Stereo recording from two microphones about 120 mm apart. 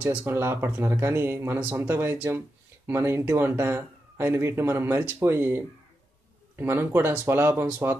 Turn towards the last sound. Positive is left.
turn(degrees=-20)  # may be behind; listen again after turning